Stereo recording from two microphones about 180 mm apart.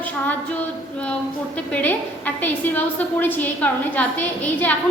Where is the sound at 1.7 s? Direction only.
10° left (ahead or behind).